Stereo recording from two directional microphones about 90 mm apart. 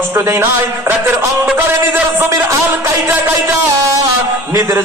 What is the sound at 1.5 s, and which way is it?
Speech, 25° right (ahead or behind).